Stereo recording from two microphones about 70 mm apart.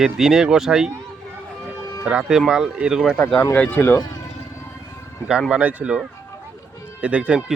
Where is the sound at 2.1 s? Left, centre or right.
Centre.